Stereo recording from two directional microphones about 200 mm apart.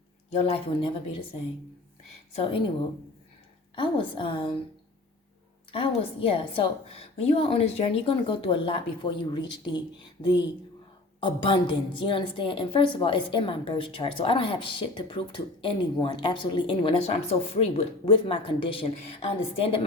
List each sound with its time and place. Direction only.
0.3 s a woman's voice: 30° left (ahead or behind)
2.3 s a woman's voice: 30° left (ahead or behind)
3.8 s a woman's voice: 25° left (ahead or behind)
5.7 s a woman's voice: 25° left (ahead or behind)